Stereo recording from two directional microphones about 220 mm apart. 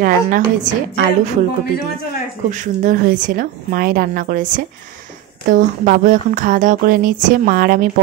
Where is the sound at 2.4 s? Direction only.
35° right (ahead or behind).